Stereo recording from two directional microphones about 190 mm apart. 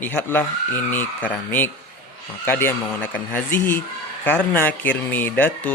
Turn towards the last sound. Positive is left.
turn(degrees=10)  # may be behind; listen again after turning